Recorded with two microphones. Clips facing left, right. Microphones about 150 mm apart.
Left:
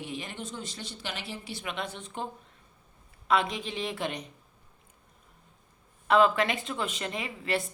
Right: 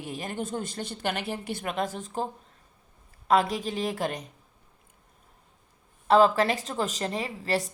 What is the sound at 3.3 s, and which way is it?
Speech, 40° right (ahead or behind).